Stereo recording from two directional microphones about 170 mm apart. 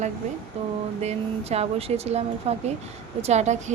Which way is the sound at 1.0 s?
40° right (ahead or behind).